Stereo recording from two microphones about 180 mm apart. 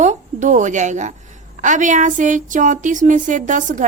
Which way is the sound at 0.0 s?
40° right (ahead or behind).